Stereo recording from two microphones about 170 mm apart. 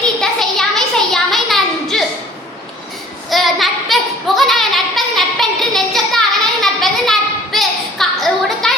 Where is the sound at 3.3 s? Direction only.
Centre (ahead or behind).